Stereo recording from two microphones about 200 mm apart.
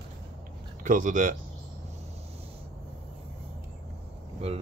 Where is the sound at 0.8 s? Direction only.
40° right (ahead or behind).